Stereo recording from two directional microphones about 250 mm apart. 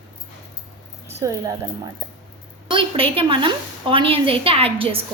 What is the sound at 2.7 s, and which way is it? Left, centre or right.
A woman's voice, right.